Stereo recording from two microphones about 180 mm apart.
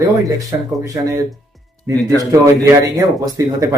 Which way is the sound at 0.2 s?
20° right (ahead or behind).